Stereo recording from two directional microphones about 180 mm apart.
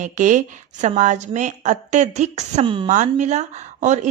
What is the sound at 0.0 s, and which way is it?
A woman's voice, 45° right (ahead or behind).